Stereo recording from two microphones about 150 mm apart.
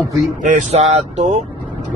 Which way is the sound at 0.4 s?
55° right (ahead or behind).